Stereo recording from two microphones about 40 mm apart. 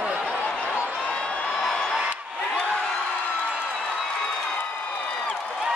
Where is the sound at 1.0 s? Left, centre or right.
Left.